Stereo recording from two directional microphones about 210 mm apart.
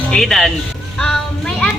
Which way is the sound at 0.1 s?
Centre (ahead or behind).